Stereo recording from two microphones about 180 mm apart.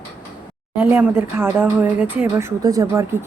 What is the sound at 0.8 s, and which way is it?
Speech, 10° right (ahead or behind).